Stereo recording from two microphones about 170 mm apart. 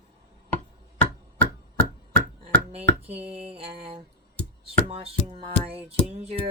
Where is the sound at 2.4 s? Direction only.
35° right (ahead or behind).